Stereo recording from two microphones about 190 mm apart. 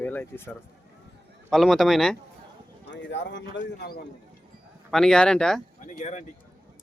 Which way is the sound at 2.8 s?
70° left (ahead or behind).